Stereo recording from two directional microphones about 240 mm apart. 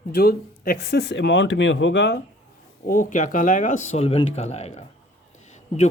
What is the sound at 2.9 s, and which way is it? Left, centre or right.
Speech, left.